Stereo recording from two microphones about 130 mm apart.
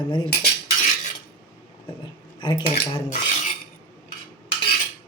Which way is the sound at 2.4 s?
35° left (ahead or behind).